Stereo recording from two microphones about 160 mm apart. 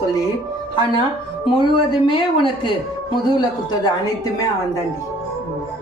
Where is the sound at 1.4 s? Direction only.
30° left (ahead or behind).